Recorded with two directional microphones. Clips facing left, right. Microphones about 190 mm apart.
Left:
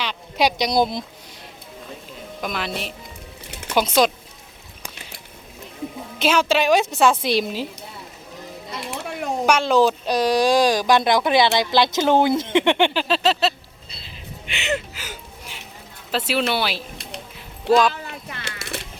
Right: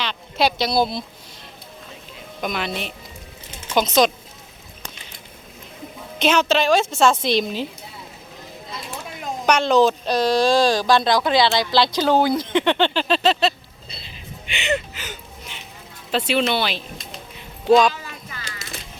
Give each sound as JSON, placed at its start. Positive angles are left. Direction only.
{"t": 0.0, "sound": "speech", "side_deg": 10}
{"t": 2.4, "sound": "a woman's voice", "side_deg": 0}
{"t": 6.1, "sound": "speech", "side_deg": 5}
{"t": 8.9, "sound": "a sound", "side_deg": 70}
{"t": 9.5, "sound": "speech", "side_deg": 5}
{"t": 14.0, "sound": "a sound", "side_deg": 0}
{"t": 16.1, "sound": "a woman's voice", "side_deg": 5}
{"t": 17.3, "sound": "music", "side_deg": 0}
{"t": 17.9, "sound": "a sound", "side_deg": 60}